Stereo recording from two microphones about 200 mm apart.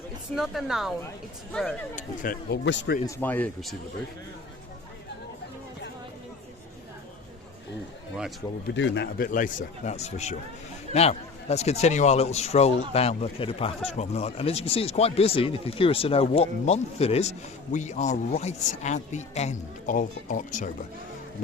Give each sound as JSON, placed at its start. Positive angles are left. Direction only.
{"t": 0.3, "sound": "speech", "side_deg": 0}
{"t": 2.0, "sound": "speech", "side_deg": 45}
{"t": 2.6, "sound": "a man's voice", "side_deg": 60}
{"t": 3.2, "sound": "speech", "side_deg": 10}
{"t": 8.6, "sound": "speech", "side_deg": 60}